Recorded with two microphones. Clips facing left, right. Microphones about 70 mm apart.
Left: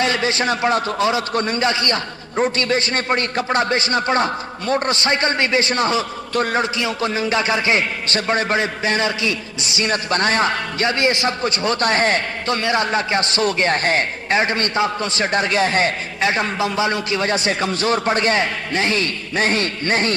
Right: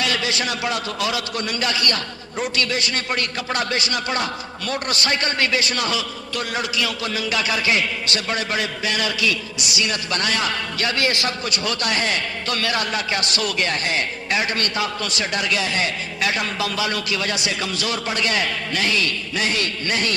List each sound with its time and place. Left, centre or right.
0.0 s a man's voice: left
12.5 s a man's voice: left